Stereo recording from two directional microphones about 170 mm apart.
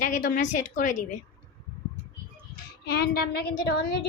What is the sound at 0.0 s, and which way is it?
A woman's voice, 50° left (ahead or behind).